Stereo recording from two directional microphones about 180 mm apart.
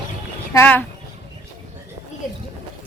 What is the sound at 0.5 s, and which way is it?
Speech, 10° left (ahead or behind).